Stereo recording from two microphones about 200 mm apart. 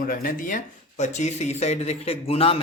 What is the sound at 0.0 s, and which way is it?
A man's voice, 45° left (ahead or behind).